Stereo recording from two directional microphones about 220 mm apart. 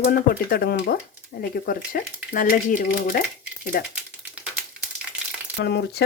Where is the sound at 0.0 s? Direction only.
45° left (ahead or behind).